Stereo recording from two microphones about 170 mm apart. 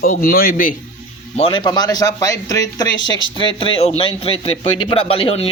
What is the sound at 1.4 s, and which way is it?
A man's voice, 30° left (ahead or behind).